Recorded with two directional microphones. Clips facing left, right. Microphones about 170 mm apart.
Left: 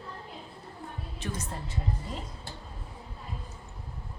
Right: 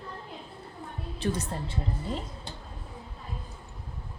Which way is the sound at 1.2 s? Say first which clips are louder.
Right 7 dB; 35° right (ahead or behind).